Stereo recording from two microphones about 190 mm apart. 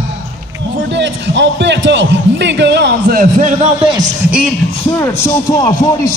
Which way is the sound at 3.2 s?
40° right (ahead or behind).